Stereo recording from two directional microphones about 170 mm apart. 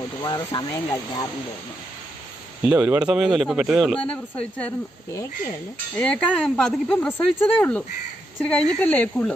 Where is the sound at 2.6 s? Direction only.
10° right (ahead or behind); by 9.3 s 10° left (ahead or behind).